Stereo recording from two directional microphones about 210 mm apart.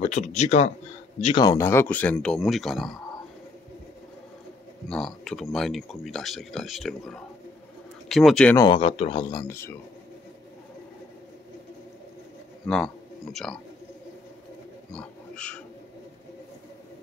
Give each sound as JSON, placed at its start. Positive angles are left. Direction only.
{"t": 0.0, "sound": "speech", "side_deg": 35}
{"t": 1.2, "sound": "speech", "side_deg": 20}
{"t": 4.8, "sound": "speech", "side_deg": 0}
{"t": 8.5, "sound": "speech", "side_deg": 25}
{"t": 12.6, "sound": "a man's voice", "side_deg": 5}
{"t": 14.9, "sound": "wild animals", "side_deg": 5}